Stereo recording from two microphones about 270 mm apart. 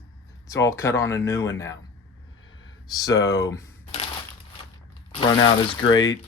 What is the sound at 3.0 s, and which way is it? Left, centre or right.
Speech, centre.